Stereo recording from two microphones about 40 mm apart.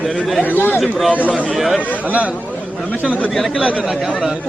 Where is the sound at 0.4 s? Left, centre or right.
Left.